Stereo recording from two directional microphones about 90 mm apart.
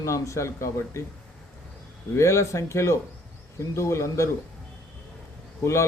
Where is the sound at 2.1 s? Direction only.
35° left (ahead or behind).